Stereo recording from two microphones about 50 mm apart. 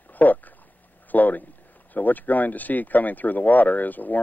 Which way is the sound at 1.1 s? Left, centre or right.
Left.